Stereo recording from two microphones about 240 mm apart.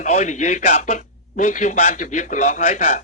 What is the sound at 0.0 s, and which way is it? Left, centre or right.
A man's voice, left.